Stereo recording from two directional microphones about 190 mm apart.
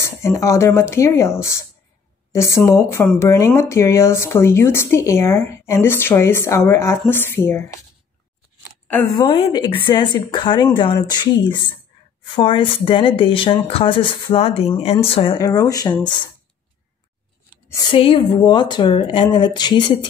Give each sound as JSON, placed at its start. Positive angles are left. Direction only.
{"t": 0.0, "sound": "speech", "side_deg": 15}
{"t": 2.3, "sound": "speech", "side_deg": 15}
{"t": 9.1, "sound": "a woman's voice", "side_deg": 25}
{"t": 15.3, "sound": "a woman's voice", "side_deg": 20}
{"t": 17.6, "sound": "a woman's voice", "side_deg": 20}